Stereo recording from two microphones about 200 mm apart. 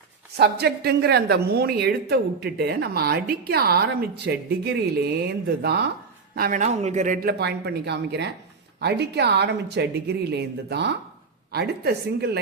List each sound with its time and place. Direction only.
0.3 s a woman's voice: 55° right (ahead or behind)
6.3 s a woman's voice: 45° right (ahead or behind)